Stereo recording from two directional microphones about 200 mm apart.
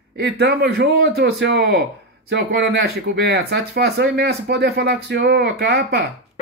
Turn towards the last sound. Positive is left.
turn(degrees=-60)  # may be behind; listen again after turning